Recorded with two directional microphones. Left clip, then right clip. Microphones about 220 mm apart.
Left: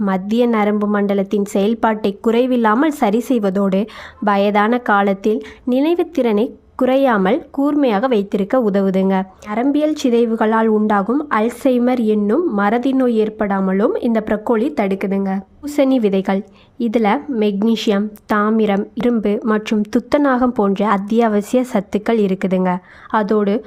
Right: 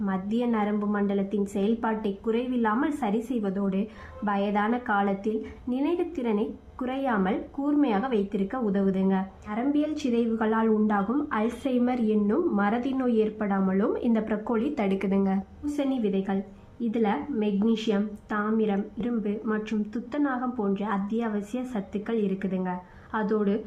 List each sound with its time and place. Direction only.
0.0 s a woman's voice: 45° left (ahead or behind); by 15.4 s 30° left (ahead or behind)
15.7 s a woman's voice: 45° left (ahead or behind)